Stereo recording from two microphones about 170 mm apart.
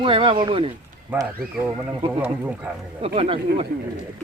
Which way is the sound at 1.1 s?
10° right (ahead or behind).